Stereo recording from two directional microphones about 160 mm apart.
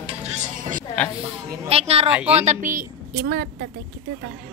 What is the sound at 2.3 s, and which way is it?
A woman's voice, 50° right (ahead or behind).